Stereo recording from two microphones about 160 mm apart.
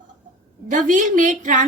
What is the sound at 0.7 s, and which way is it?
Speech, 55° right (ahead or behind).